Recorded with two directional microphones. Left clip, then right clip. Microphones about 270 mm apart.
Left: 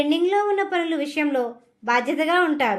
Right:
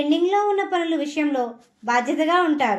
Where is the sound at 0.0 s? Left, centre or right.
Left.